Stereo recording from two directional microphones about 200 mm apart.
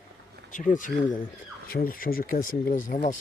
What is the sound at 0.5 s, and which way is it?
Speech, 40° left (ahead or behind).